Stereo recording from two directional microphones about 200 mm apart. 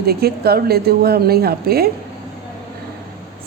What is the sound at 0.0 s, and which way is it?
A woman's voice, 50° right (ahead or behind).